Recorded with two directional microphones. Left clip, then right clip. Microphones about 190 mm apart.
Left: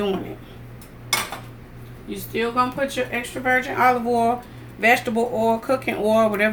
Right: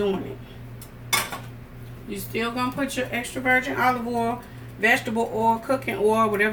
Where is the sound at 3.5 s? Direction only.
40° left (ahead or behind).